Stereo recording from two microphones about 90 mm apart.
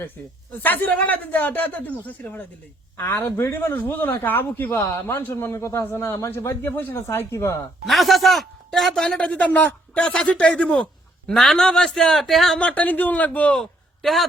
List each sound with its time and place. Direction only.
0.2 s a man's voice: 20° left (ahead or behind)
7.9 s a man's voice: centre (ahead or behind)
12.5 s speech: 15° left (ahead or behind)